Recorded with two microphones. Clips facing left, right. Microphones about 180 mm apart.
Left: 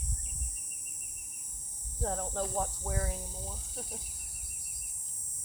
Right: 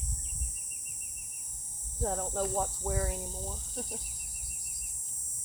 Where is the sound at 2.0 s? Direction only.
5° right (ahead or behind).